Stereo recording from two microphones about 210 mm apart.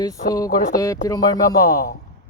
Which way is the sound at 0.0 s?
15° left (ahead or behind).